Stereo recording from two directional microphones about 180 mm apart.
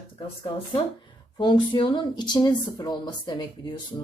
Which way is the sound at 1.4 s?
25° left (ahead or behind).